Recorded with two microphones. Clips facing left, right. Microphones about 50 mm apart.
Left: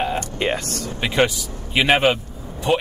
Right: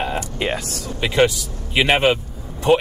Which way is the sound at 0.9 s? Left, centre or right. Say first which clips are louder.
Right 2 dB; centre.